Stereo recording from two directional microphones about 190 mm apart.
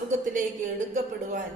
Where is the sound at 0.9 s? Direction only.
40° right (ahead or behind).